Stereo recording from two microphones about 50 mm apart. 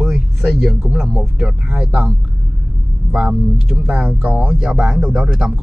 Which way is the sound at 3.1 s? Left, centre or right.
Centre.